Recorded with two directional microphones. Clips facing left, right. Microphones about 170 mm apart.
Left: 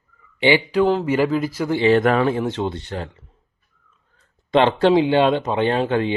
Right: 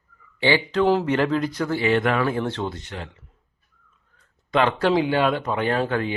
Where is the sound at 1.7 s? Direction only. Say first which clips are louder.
Left 8 dB; 25° left (ahead or behind).